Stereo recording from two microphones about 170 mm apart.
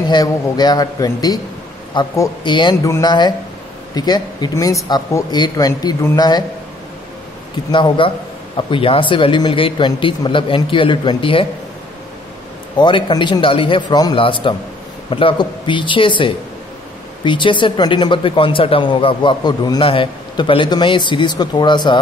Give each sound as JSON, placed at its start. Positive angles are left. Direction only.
{"t": 0.1, "sound": "speech", "side_deg": 25}
{"t": 7.7, "sound": "speech", "side_deg": 30}
{"t": 12.7, "sound": "speech", "side_deg": 25}